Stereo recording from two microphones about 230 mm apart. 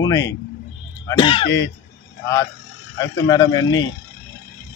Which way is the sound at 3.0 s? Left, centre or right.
Centre.